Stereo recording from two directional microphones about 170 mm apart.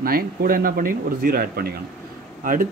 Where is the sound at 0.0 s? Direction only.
60° right (ahead or behind).